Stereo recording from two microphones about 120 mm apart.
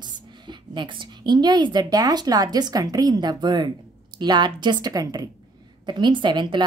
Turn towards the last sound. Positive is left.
turn(degrees=-40)  # may be behind; listen again after turning